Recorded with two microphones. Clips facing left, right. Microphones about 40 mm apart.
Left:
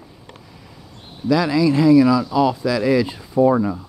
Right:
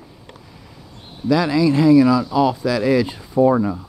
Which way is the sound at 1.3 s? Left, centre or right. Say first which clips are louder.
Even; right.